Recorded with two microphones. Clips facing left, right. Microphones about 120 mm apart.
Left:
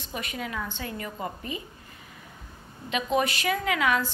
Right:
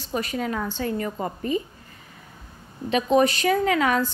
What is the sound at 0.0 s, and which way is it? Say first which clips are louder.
A woman's voice: right 7 dB; 35° right (ahead or behind).